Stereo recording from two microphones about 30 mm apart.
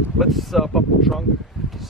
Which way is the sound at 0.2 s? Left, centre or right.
Centre.